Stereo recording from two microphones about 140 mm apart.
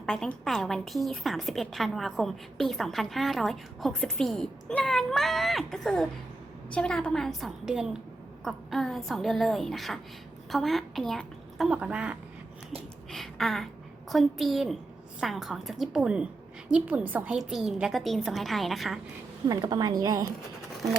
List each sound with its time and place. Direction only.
0.0 s a woman's voice: 5° left (ahead or behind)
13.1 s a sound: centre (ahead or behind)
14.1 s a woman's voice: centre (ahead or behind)
17.3 s a woman's voice: centre (ahead or behind)
19.5 s a woman's voice: 30° right (ahead or behind)